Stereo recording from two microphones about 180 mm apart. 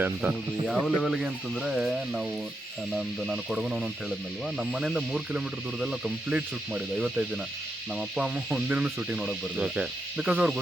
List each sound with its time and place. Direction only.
0.0 s speech: 5° right (ahead or behind)
3.2 s speech: centre (ahead or behind)